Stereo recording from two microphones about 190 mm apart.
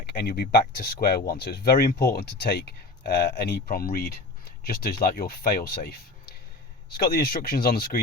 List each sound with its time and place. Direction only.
0.0 s speech: 60° left (ahead or behind)
7.0 s speech: 55° left (ahead or behind)